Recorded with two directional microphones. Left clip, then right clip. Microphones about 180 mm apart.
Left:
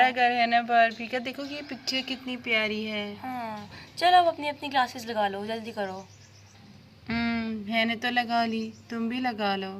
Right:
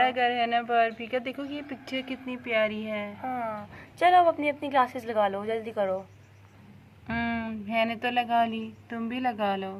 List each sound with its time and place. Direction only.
0.0 s speech: 10° left (ahead or behind)
4.0 s a woman's voice: 25° right (ahead or behind)
7.1 s speech: 10° left (ahead or behind)